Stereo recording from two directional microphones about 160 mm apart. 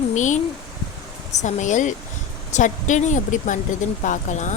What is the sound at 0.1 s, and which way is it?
Speech, 50° left (ahead or behind).